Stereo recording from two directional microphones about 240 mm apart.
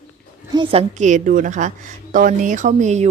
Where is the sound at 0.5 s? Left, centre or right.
Right.